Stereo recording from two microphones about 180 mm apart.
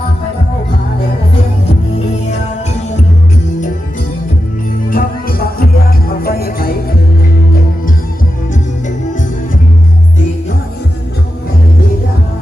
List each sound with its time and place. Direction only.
4.9 s music: 55° left (ahead or behind)